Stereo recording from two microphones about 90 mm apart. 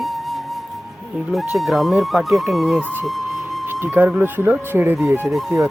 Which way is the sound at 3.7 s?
25° right (ahead or behind).